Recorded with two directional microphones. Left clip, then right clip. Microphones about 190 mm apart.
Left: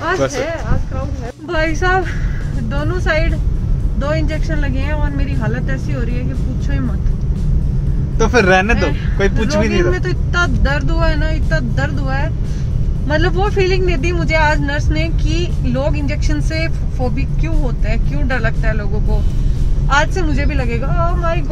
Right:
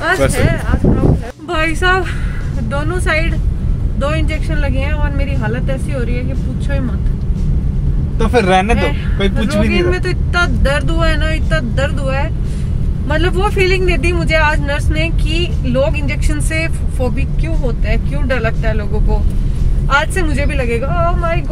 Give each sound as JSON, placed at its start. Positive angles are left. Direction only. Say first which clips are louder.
{"t": 0.3, "sound": "speech", "louder": "right 3 dB", "side_deg": 10}
{"t": 8.2, "sound": "speech", "louder": "even", "side_deg": 0}
{"t": 17.8, "sound": "speech", "louder": "right 4 dB", "side_deg": 0}
{"t": 19.9, "sound": "speech", "louder": "right 1 dB", "side_deg": -5}